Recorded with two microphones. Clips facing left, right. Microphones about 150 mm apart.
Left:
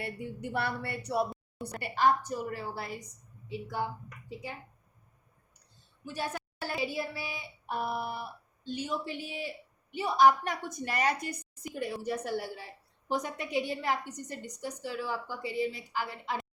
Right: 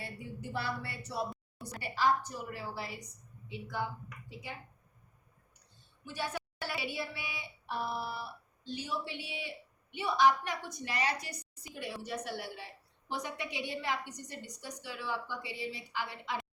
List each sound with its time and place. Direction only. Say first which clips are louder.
0.0 s a woman's voice: left 6 dB; 60° left (ahead or behind)
6.1 s a woman's voice: left 2 dB; 40° left (ahead or behind)